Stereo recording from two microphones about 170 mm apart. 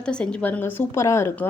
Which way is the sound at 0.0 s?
5° left (ahead or behind).